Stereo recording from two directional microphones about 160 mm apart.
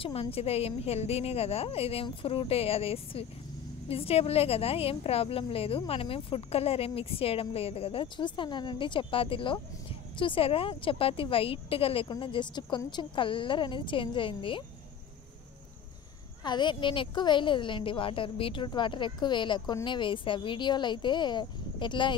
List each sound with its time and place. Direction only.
0.0 s a woman's voice: 35° left (ahead or behind)
16.4 s a woman's voice: 30° left (ahead or behind)